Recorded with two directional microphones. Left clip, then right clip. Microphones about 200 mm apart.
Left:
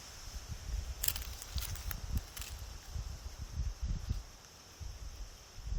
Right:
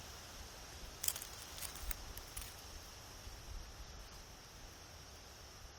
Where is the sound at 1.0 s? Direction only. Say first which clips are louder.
Left 4 dB; 30° left (ahead or behind).